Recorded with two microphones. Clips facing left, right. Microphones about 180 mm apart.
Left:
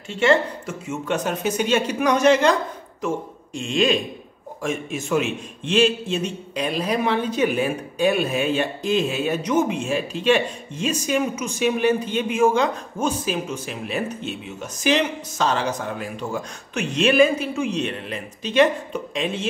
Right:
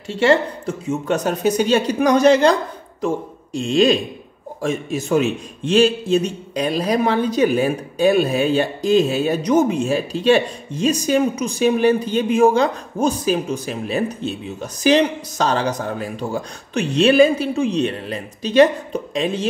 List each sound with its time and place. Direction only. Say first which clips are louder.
0.2 s a man's voice: right 3 dB; 35° right (ahead or behind)
3.5 s a man's voice: right 5 dB; 35° right (ahead or behind)